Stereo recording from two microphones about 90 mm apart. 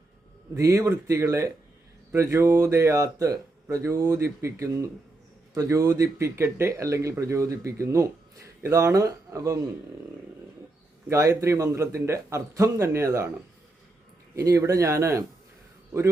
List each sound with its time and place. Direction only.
0.5 s speech: 35° right (ahead or behind)
11.1 s speech: 35° right (ahead or behind)
14.3 s speech: 35° right (ahead or behind)